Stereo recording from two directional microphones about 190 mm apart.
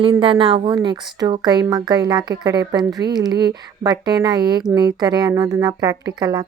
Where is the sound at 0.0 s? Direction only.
25° right (ahead or behind).